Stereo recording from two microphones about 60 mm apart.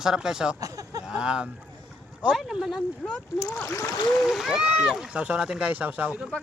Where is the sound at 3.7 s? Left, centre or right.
Left.